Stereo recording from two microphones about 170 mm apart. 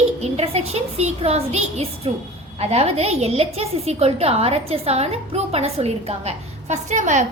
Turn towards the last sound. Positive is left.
turn(degrees=-45)  # may be behind; listen again after turning